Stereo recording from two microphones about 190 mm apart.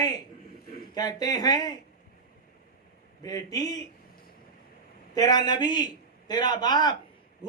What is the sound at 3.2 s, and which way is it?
Speech, 20° left (ahead or behind).